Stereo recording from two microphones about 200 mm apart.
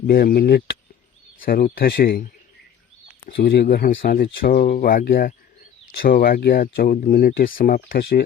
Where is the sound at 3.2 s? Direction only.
50° left (ahead or behind).